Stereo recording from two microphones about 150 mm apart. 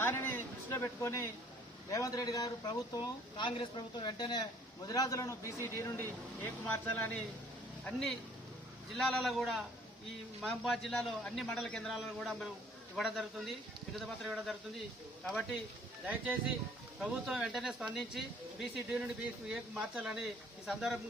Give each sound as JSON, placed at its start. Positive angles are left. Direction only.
{"t": 0.0, "sound": "a man's voice", "side_deg": 15}
{"t": 7.9, "sound": "a man's voice", "side_deg": 5}
{"t": 15.2, "sound": "speech", "side_deg": 5}
{"t": 16.0, "sound": "a man's voice", "side_deg": -10}